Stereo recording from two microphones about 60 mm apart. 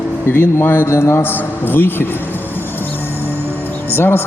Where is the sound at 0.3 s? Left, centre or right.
Left.